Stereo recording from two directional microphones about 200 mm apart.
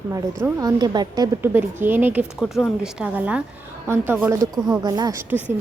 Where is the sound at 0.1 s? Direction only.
15° right (ahead or behind).